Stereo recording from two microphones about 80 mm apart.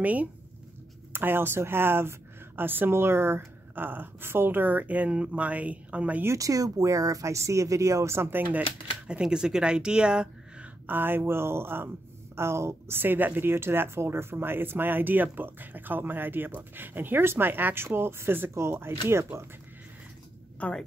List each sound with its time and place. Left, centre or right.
0.0 s speech: centre
6.2 s speech: right
9.0 s speech: centre
10.9 s speech: right
20.5 s speech: centre